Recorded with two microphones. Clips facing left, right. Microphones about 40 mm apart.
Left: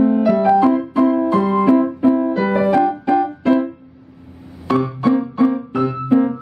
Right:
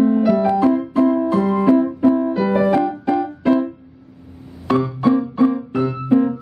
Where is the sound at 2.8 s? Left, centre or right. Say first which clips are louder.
Left 3 dB; centre.